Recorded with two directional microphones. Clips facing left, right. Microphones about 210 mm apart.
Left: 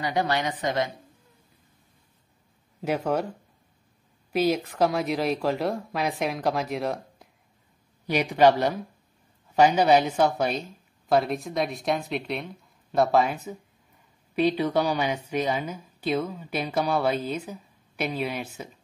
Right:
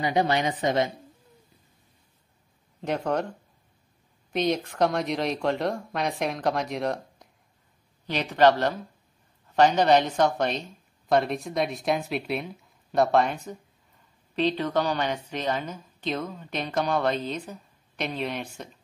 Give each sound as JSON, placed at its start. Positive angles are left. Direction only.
{"t": 0.0, "sound": "a woman's voice", "side_deg": -20}
{"t": 2.8, "sound": "a woman's voice", "side_deg": 5}